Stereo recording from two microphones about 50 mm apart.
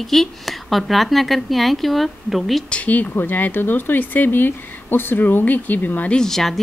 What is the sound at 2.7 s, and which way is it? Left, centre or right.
Speech, left.